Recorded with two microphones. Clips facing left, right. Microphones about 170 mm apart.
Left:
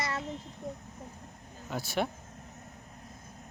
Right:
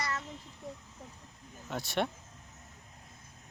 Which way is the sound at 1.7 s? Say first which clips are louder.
Left 1 dB; centre (ahead or behind).